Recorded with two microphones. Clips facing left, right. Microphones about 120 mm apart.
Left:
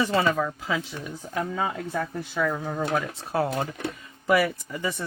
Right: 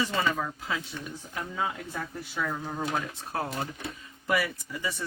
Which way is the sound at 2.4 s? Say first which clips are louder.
Left 5 dB; 60° left (ahead or behind).